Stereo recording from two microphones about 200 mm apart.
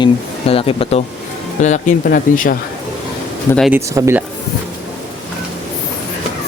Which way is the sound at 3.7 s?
10° right (ahead or behind).